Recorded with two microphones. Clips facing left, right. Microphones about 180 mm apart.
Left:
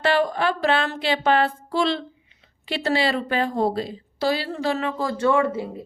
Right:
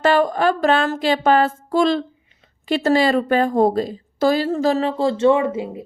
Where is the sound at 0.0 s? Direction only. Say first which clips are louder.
Right 4 dB; 45° right (ahead or behind); by 5.8 s 15° right (ahead or behind).